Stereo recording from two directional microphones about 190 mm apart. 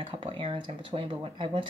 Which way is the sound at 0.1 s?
25° right (ahead or behind).